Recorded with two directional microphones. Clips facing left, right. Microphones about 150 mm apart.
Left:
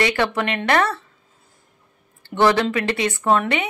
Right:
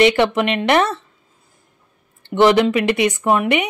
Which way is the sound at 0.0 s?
20° right (ahead or behind).